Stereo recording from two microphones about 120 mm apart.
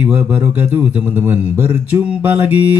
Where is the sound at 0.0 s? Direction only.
15° right (ahead or behind).